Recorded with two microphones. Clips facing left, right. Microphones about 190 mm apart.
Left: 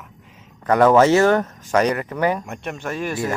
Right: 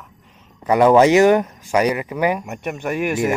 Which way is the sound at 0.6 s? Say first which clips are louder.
Right 1 dB; 10° right (ahead or behind).